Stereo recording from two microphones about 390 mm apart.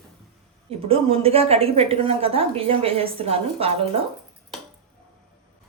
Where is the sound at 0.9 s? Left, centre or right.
Centre.